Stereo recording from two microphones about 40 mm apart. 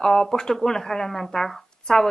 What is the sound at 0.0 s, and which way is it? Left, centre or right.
Speech, centre.